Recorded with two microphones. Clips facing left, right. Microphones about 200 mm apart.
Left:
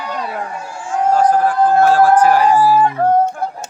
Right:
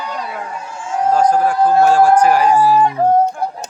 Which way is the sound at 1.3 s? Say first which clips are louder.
Even; 10° right (ahead or behind).